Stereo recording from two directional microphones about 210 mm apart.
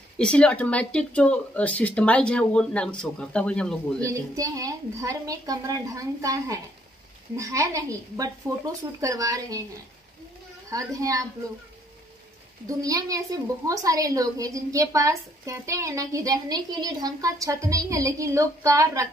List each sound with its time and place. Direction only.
0.2 s speech: 5° left (ahead or behind)
4.0 s a woman's voice: 15° right (ahead or behind)
10.7 s a woman's voice: 15° right (ahead or behind)
12.6 s a woman's voice: 15° right (ahead or behind)